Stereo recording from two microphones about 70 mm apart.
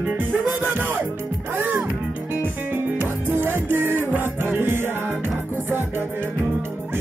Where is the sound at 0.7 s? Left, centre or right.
Right.